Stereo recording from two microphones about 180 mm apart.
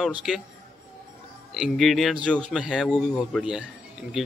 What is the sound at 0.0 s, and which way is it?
Speech, 5° right (ahead or behind).